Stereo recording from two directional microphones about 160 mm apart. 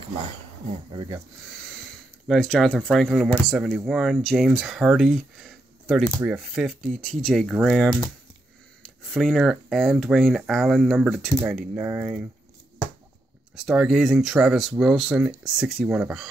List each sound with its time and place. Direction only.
0.7 s speech: 30° right (ahead or behind)
1.6 s speech: 5° left (ahead or behind)
11.7 s speech: 15° right (ahead or behind)
13.7 s speech: 5° right (ahead or behind)